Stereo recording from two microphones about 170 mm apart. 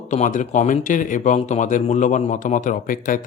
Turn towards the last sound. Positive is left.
turn(degrees=50)  # may be behind; listen again after turning